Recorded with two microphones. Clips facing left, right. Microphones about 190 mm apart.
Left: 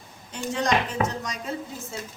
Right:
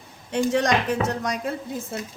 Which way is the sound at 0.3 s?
65° right (ahead or behind).